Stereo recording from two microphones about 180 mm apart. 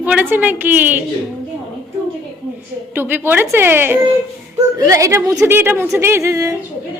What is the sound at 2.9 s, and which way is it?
A woman's voice, 10° right (ahead or behind).